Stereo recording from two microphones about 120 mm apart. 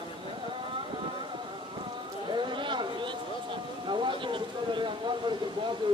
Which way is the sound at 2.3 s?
40° right (ahead or behind).